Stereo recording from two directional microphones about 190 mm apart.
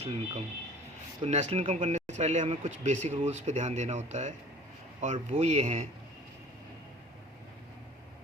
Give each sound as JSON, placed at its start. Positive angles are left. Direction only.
{"t": 0.0, "sound": "speech", "side_deg": -30}